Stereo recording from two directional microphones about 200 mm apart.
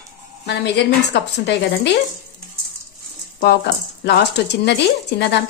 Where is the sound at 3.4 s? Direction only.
55° left (ahead or behind).